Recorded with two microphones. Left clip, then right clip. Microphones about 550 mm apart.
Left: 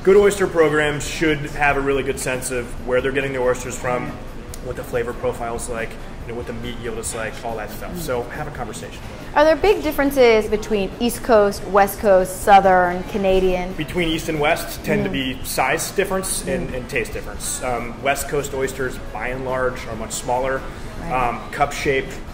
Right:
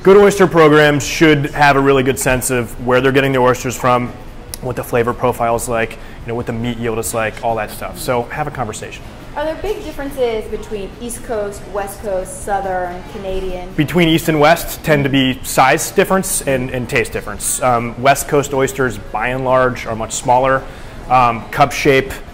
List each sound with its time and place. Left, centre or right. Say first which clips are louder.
0.0 s speech: right 6 dB; right
4.9 s speech: right 8 dB; right
9.3 s a woman's voice: left 6 dB; left
13.7 s speech: right 8 dB; right